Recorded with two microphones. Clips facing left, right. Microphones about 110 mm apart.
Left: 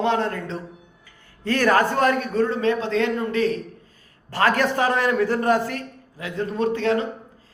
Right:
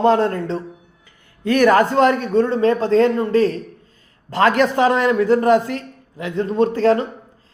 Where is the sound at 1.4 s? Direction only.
20° right (ahead or behind); by 3.6 s 35° right (ahead or behind).